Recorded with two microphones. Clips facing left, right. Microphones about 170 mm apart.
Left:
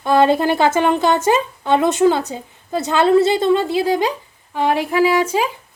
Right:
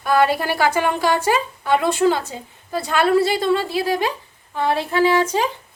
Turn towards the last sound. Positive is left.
turn(degrees=10)  # may be behind; listen again after turning